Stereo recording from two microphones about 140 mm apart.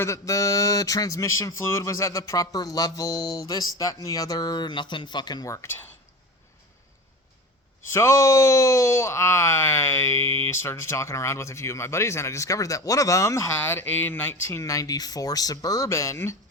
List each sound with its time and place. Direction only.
0.0 s speech: 20° left (ahead or behind)
7.9 s speech: 20° left (ahead or behind)